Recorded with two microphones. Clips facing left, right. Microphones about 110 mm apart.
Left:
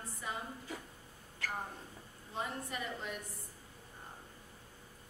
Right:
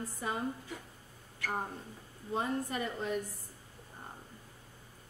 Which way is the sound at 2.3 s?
40° right (ahead or behind).